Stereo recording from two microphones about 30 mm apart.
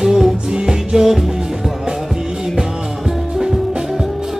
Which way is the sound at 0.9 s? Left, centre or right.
Centre.